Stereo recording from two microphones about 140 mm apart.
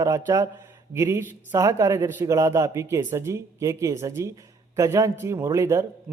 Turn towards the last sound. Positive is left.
turn(degrees=-20)  # may be behind; listen again after turning